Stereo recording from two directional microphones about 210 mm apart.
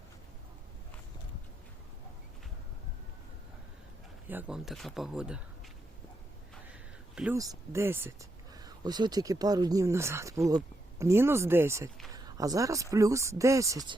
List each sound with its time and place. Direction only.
4.3 s speech: 5° right (ahead or behind)
7.3 s speech: 15° right (ahead or behind)